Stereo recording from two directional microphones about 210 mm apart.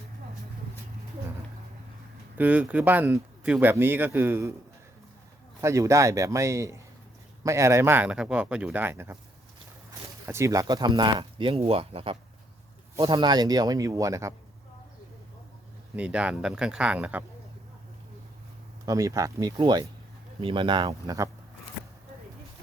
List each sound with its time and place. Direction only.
2.4 s speech: 5° right (ahead or behind)
5.6 s speech: 15° right (ahead or behind)
10.2 s speech: 15° right (ahead or behind)
16.0 s speech: 5° right (ahead or behind)
18.9 s speech: 15° right (ahead or behind)